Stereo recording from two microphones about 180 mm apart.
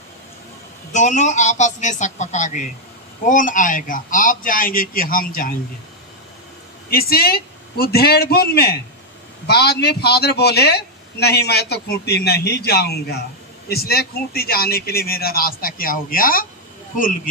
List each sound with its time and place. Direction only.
0.9 s a man's voice: 40° left (ahead or behind)
6.9 s a man's voice: 55° left (ahead or behind)